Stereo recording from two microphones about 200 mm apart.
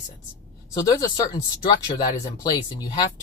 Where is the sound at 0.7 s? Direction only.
20° left (ahead or behind).